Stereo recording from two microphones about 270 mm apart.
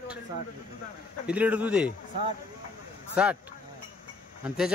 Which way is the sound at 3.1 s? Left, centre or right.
Centre.